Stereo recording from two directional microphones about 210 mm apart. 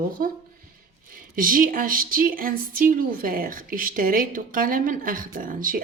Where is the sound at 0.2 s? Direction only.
40° right (ahead or behind).